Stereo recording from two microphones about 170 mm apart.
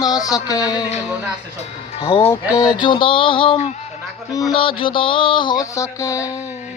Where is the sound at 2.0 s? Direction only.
30° left (ahead or behind).